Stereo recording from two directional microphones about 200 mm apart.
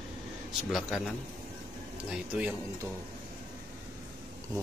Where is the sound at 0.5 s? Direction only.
Centre (ahead or behind).